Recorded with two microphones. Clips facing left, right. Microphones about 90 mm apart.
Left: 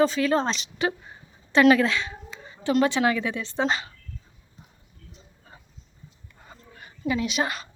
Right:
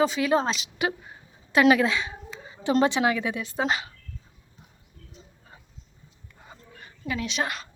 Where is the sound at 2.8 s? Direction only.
15° right (ahead or behind).